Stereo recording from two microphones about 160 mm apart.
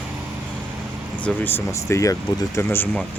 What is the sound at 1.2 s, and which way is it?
Speech, 10° left (ahead or behind).